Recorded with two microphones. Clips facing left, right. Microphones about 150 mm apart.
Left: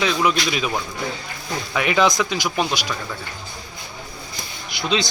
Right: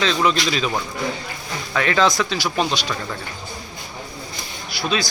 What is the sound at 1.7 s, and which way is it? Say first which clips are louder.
A man's voice: even; 15° left (ahead or behind).